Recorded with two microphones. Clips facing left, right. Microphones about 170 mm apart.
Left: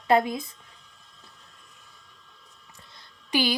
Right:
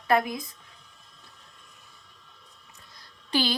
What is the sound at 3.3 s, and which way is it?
Speech, 15° left (ahead or behind).